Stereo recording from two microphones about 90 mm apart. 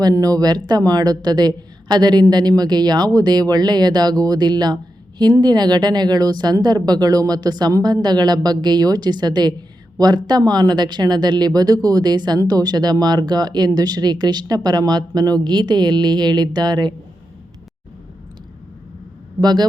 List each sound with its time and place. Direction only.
0.0 s a woman's voice: 45° right (ahead or behind)
19.4 s a woman's voice: 50° right (ahead or behind)